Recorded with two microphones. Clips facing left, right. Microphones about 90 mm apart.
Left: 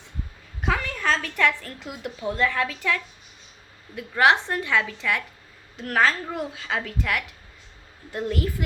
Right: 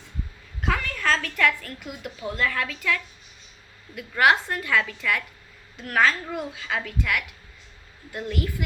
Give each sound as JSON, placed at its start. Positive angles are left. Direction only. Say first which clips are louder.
{"t": 0.6, "sound": "a sound", "louder": "left 1 dB", "side_deg": 20}
{"t": 2.3, "sound": "a woman's voice", "louder": "left 2 dB", "side_deg": 25}
{"t": 4.2, "sound": "a woman's voice", "louder": "left 1 dB", "side_deg": 25}